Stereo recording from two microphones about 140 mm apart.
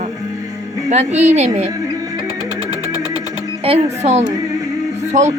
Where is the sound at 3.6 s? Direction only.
50° right (ahead or behind).